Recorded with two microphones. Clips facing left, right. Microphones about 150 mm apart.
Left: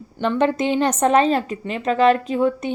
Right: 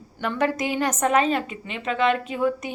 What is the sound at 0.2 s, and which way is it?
A woman's voice, 25° left (ahead or behind).